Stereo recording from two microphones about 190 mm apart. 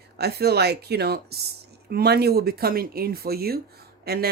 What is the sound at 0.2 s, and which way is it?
Speech, 60° right (ahead or behind).